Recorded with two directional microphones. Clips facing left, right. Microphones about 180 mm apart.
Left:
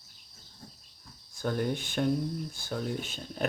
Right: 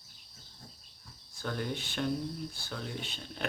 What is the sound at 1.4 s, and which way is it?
A man's voice, 50° left (ahead or behind).